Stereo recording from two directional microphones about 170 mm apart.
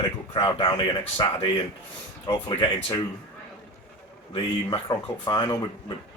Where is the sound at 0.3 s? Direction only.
25° left (ahead or behind).